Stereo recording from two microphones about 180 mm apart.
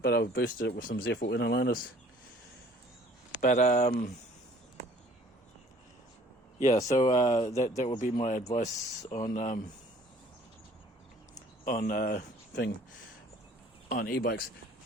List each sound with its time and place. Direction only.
0.0 s speech: 65° left (ahead or behind)
0.8 s speech: 50° left (ahead or behind)
1.3 s speech: 70° left (ahead or behind)
3.4 s speech: 45° left (ahead or behind)
6.6 s speech: 40° left (ahead or behind)
11.6 s speech: 50° left (ahead or behind)
13.8 s speech: 55° left (ahead or behind)